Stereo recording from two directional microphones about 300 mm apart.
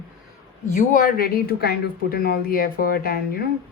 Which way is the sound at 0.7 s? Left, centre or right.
Left.